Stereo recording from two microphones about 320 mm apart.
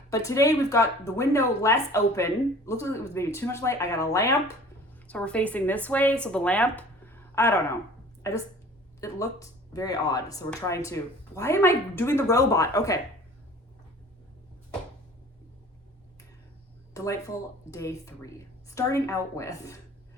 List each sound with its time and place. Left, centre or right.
0.1 s speech: centre
16.9 s speech: centre